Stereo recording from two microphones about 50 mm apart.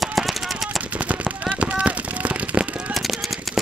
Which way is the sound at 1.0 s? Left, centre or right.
Right.